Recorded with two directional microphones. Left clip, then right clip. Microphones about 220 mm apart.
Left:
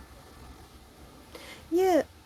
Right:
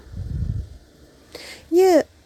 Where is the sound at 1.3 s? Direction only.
25° right (ahead or behind).